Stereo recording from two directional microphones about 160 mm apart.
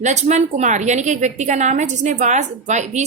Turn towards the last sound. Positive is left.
turn(degrees=-45)  # may be behind; listen again after turning